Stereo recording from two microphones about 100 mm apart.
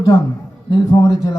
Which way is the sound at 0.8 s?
35° left (ahead or behind).